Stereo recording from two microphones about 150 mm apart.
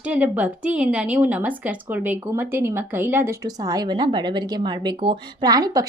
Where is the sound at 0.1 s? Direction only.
10° right (ahead or behind).